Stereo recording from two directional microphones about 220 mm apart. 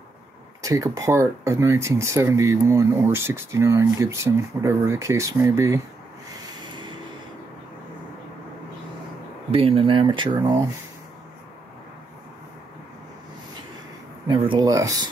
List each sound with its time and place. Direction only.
0.6 s speech: 15° right (ahead or behind)
9.5 s speech: 25° right (ahead or behind)
14.2 s speech: 20° right (ahead or behind)